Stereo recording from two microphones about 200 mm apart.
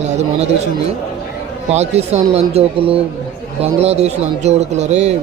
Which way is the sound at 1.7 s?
30° right (ahead or behind).